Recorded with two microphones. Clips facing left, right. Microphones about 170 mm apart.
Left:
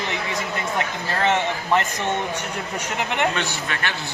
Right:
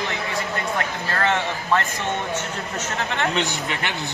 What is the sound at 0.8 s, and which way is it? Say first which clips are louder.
A man's voice: left 1 dB; 20° left (ahead or behind).